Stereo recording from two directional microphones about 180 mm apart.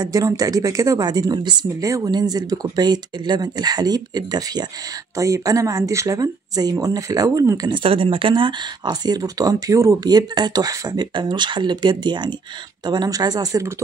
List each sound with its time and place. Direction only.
0.0 s speech: 20° right (ahead or behind)